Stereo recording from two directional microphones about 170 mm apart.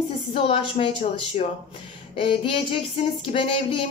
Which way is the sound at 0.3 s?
35° left (ahead or behind).